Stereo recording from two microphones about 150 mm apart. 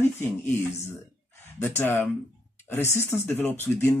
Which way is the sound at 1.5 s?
15° left (ahead or behind).